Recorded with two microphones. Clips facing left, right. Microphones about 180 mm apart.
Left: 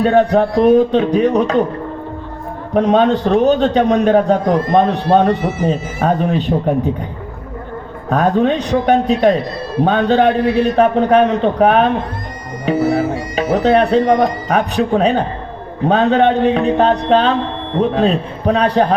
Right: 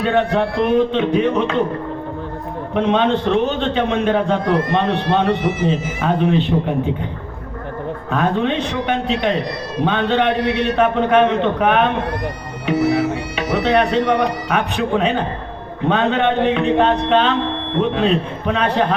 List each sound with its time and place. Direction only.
0.0 s speech: 40° left (ahead or behind)
2.7 s speech: 40° left (ahead or behind)
8.1 s speech: 40° left (ahead or behind)
12.7 s music: 35° left (ahead or behind)
13.3 s speech: 40° left (ahead or behind)